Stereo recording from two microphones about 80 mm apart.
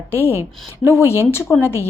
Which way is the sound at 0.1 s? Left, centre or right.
Left.